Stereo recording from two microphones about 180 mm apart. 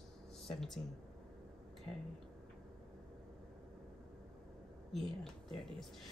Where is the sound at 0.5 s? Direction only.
Centre (ahead or behind).